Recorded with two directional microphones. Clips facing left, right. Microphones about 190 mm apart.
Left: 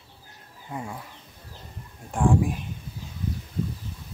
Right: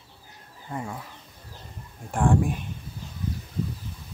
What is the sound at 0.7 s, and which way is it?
Speech, 5° left (ahead or behind).